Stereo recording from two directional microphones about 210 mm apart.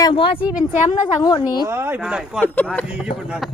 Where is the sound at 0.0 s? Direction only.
25° left (ahead or behind).